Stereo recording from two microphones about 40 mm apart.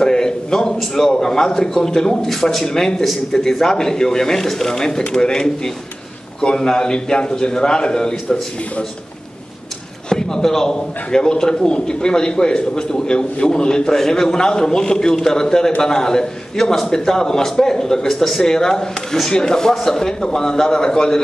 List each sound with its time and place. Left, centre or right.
0.0 s a sound: centre
0.7 s a man's voice: centre
10.0 s a man's voice: centre